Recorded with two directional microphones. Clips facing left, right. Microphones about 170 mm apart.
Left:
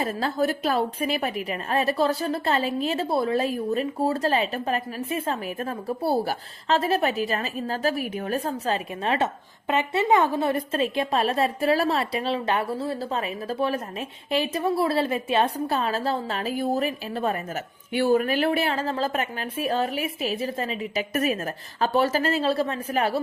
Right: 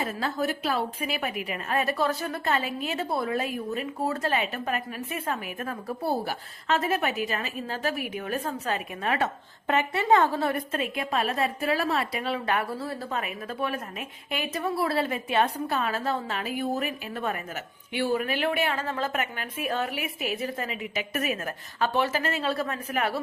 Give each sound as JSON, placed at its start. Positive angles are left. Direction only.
{"t": 0.0, "sound": "a woman's voice", "side_deg": 35}
{"t": 17.9, "sound": "a woman's voice", "side_deg": 45}